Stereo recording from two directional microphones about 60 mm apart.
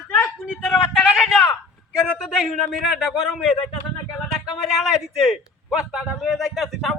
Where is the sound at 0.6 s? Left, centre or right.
Centre.